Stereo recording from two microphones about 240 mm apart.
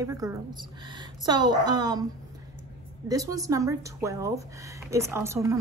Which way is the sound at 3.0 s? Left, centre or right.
Centre.